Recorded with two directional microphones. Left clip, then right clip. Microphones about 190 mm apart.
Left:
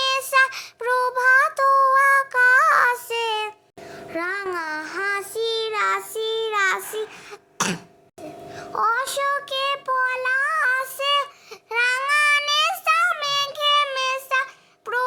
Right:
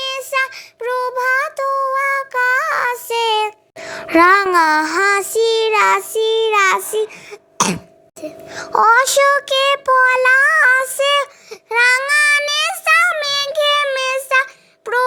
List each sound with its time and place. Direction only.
0.0 s child singing: 5° right (ahead or behind)
3.8 s music: 45° right (ahead or behind)
4.5 s child singing: 45° right (ahead or behind); by 7.8 s 25° right (ahead or behind)
8.4 s music: 40° right (ahead or behind); by 11.9 s 25° right (ahead or behind)
12.0 s child singing: 25° right (ahead or behind)